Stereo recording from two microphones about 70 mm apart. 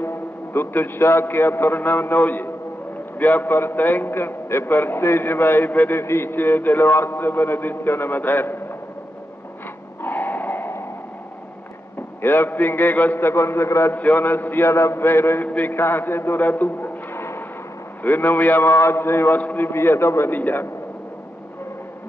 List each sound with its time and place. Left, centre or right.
0.0 s a man's voice: left
10.0 s a sound: left
12.2 s a man's voice: left
13.3 s a man's voice: left
13.9 s a man's voice: left
20.3 s a man's voice: left